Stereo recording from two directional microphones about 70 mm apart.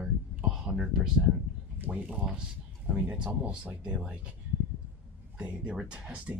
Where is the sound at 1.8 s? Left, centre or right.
Right.